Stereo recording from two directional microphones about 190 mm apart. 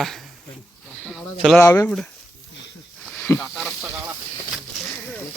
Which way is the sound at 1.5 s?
15° left (ahead or behind).